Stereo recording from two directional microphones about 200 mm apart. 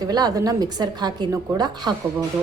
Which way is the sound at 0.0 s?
20° right (ahead or behind).